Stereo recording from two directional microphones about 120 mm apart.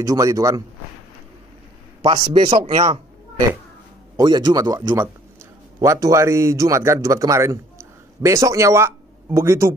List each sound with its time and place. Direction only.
0.0 s a man's voice: 30° right (ahead or behind)
2.0 s a man's voice: 35° right (ahead or behind)
4.2 s a man's voice: 35° right (ahead or behind)